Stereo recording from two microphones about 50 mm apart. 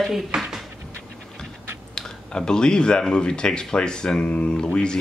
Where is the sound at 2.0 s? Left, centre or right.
Centre.